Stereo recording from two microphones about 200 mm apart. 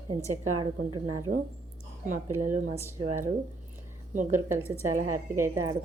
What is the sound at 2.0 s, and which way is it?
Speech, 40° right (ahead or behind).